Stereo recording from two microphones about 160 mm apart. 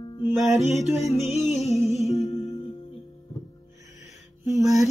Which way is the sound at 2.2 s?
25° left (ahead or behind).